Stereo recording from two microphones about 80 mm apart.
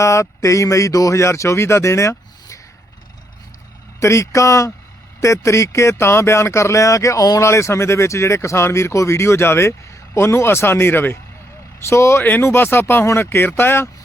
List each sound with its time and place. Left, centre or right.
0.0 s speech: left
4.0 s speech: left
12.2 s speech: left